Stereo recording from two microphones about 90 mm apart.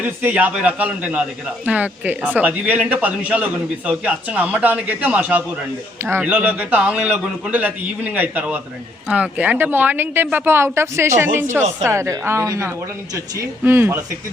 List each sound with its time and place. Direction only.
0.0 s a man's voice: 20° right (ahead or behind)